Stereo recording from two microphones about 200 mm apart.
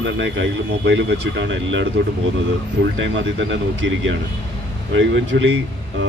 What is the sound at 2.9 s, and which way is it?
Speech, 70° right (ahead or behind).